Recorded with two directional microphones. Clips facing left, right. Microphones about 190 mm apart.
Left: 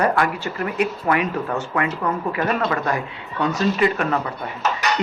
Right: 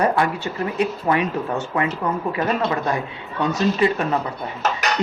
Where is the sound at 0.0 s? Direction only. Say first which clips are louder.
Even; 25° right (ahead or behind).